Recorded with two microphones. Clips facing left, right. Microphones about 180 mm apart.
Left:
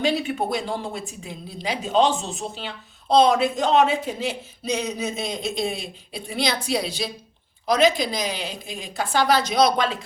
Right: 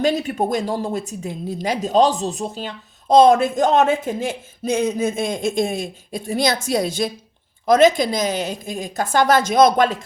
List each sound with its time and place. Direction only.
0.0 s speech: 45° right (ahead or behind)